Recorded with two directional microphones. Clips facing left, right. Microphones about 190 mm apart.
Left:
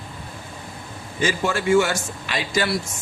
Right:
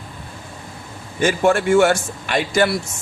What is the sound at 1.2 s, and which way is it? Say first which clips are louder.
A man's voice: right 6 dB; 55° right (ahead or behind).